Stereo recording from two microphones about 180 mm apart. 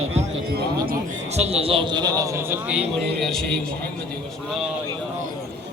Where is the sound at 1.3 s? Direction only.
35° right (ahead or behind); by 2.5 s 20° right (ahead or behind).